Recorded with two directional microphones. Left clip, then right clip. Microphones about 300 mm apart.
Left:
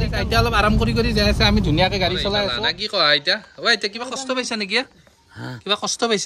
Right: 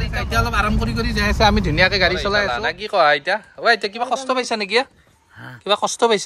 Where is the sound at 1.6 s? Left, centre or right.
Centre.